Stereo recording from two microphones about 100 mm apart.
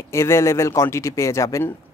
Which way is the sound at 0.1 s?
25° left (ahead or behind).